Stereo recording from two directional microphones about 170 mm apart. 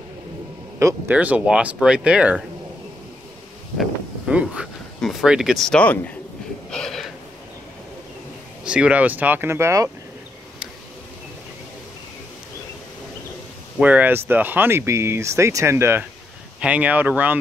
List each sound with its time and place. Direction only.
0.7 s speech: 15° right (ahead or behind)
4.3 s speech: 5° right (ahead or behind)
6.7 s a sound: centre (ahead or behind)
8.6 s speech: 5° right (ahead or behind)
13.7 s speech: 10° right (ahead or behind)